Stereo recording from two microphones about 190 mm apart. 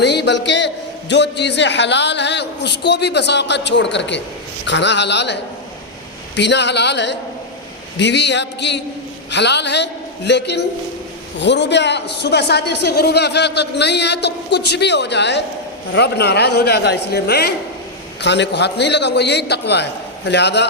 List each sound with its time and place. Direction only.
0.0 s a man's voice: 65° left (ahead or behind)